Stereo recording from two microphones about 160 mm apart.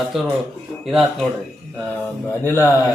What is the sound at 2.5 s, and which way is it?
Speech, 15° left (ahead or behind).